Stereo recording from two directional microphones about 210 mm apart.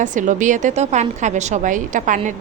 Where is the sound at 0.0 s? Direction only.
35° right (ahead or behind).